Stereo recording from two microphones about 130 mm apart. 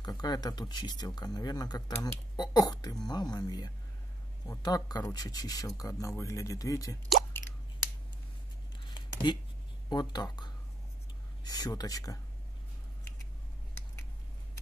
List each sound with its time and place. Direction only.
0.0 s speech: 30° left (ahead or behind)
8.8 s a sound: 35° left (ahead or behind)
9.8 s speech: 35° left (ahead or behind)